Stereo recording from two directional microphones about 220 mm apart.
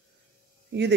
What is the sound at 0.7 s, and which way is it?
Speech, 50° right (ahead or behind).